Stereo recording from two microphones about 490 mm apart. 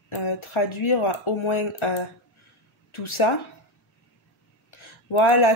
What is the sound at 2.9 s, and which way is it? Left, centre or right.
Speech, left.